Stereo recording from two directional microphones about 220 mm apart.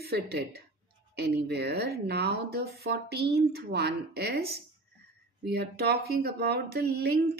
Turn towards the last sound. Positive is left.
turn(degrees=-45)  # may be behind; listen again after turning